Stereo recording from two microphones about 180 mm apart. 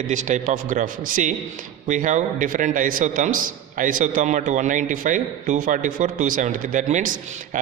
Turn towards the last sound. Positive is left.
turn(degrees=-45)  # may be behind; listen again after turning